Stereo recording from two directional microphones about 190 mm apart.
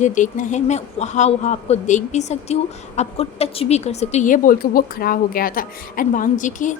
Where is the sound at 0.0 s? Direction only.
40° left (ahead or behind).